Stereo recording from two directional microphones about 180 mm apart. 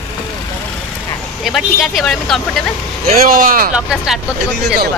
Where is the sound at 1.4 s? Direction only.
Centre (ahead or behind).